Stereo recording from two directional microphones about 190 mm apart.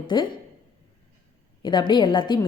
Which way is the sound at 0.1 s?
25° left (ahead or behind).